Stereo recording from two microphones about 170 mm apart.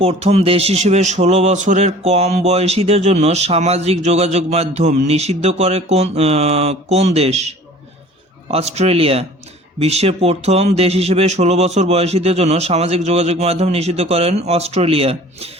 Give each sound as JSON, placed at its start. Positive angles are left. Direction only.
{"t": 0.0, "sound": "a man's voice", "side_deg": -40}